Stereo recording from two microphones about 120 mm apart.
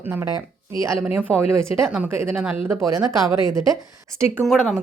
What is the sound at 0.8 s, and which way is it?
Speech, 25° right (ahead or behind).